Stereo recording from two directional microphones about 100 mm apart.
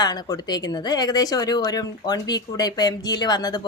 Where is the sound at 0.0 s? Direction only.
45° left (ahead or behind).